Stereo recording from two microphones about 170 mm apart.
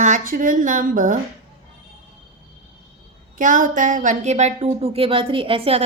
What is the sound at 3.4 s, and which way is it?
Speech, 50° right (ahead or behind).